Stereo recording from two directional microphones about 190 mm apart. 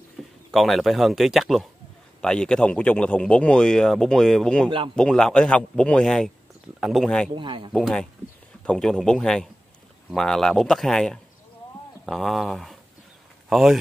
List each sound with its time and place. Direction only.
0.5 s speech: centre (ahead or behind)
4.6 s speech: 25° right (ahead or behind)
4.9 s speech: 5° left (ahead or behind)
7.3 s speech: 25° right (ahead or behind)
7.7 s speech: 5° left (ahead or behind)